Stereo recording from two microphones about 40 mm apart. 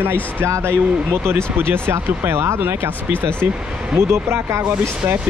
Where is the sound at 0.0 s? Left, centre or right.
Right.